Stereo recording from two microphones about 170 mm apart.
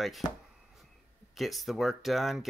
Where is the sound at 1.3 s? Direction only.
Centre (ahead or behind).